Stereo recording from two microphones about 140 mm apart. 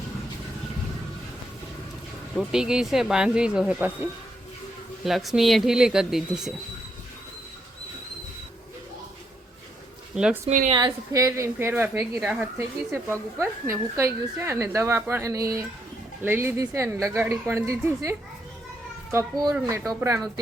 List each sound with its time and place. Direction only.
2.3 s speech: 5° right (ahead or behind)
5.0 s speech: centre (ahead or behind)
10.4 s speech: 70° right (ahead or behind)
10.7 s a woman's voice: 30° right (ahead or behind)